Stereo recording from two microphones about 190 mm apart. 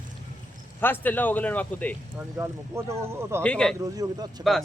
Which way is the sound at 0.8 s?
10° left (ahead or behind).